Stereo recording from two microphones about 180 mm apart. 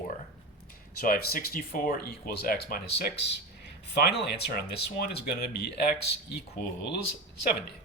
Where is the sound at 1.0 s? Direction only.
55° left (ahead or behind).